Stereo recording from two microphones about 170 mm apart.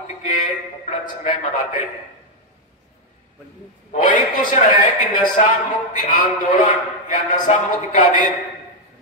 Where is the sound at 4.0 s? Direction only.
45° left (ahead or behind).